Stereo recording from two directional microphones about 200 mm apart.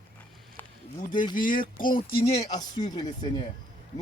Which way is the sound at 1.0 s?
40° left (ahead or behind).